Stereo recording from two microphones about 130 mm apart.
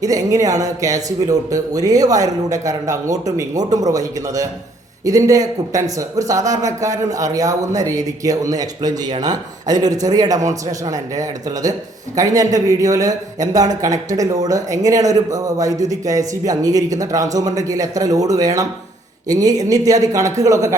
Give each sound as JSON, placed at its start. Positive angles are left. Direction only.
{"t": 0.0, "sound": "speech", "side_deg": -25}